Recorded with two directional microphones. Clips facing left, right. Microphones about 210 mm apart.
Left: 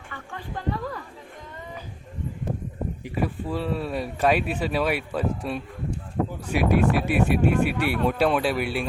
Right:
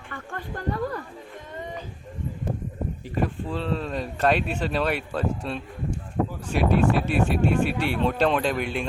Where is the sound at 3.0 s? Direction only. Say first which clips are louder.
Even; 10° left (ahead or behind).